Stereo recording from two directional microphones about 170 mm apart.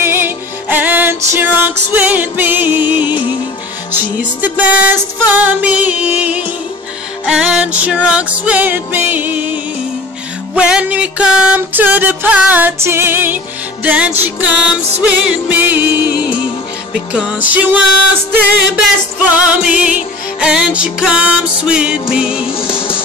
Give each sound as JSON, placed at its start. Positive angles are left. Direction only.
{"t": 0.0, "sound": "music", "side_deg": -15}
{"t": 19.3, "sound": "music", "side_deg": -5}
{"t": 22.5, "sound": "music", "side_deg": 30}